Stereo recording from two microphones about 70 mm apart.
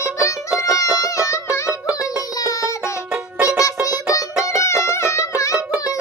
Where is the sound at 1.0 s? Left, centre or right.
Left.